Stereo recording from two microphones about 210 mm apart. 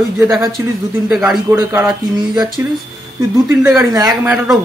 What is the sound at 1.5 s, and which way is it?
Speech, 10° right (ahead or behind).